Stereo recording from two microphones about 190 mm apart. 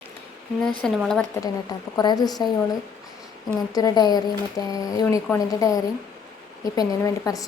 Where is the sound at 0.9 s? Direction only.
5° left (ahead or behind).